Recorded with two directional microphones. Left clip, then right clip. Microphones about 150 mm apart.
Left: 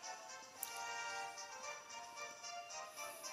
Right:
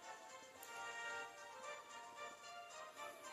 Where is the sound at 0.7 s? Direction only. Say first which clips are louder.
Left 3 dB; 40° left (ahead or behind).